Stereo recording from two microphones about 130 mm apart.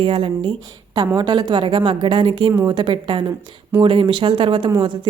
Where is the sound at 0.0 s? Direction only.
40° right (ahead or behind).